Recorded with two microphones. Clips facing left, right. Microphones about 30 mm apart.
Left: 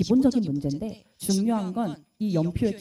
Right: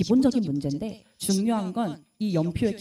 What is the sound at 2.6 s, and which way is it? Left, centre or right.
Speech, right.